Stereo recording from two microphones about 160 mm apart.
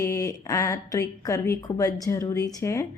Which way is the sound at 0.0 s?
20° left (ahead or behind).